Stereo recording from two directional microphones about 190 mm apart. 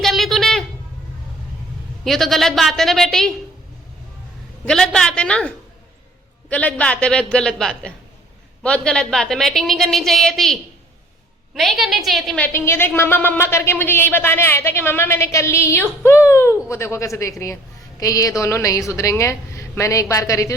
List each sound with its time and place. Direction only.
0.0 s a sound: centre (ahead or behind)
2.0 s a woman's voice: centre (ahead or behind)
4.6 s a woman's voice: 5° left (ahead or behind)